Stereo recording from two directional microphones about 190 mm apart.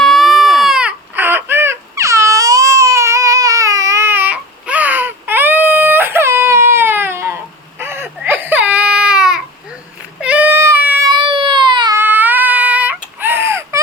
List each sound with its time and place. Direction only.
0.0 s baby cry: centre (ahead or behind)
11.1 s baby cry: 25° right (ahead or behind)
11.9 s baby cry: 10° right (ahead or behind)